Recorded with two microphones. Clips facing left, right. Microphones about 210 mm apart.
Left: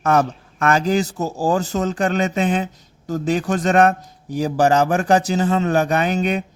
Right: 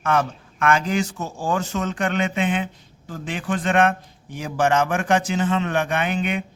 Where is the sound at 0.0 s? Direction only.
40° left (ahead or behind).